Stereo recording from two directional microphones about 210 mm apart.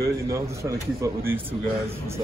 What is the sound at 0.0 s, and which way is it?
A man's voice, 15° right (ahead or behind).